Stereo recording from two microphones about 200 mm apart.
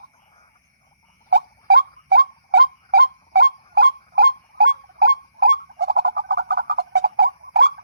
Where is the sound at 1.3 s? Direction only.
55° right (ahead or behind).